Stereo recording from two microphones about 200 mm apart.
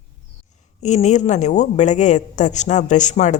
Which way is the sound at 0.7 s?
35° left (ahead or behind).